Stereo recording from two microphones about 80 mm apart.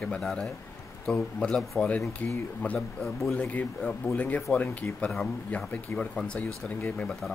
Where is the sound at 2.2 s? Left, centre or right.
Left; by 3.3 s centre.